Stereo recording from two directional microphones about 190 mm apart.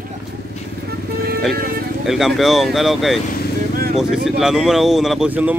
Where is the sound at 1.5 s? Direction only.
50° right (ahead or behind).